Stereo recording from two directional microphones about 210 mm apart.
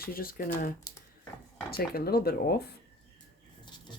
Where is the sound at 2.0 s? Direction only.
45° left (ahead or behind).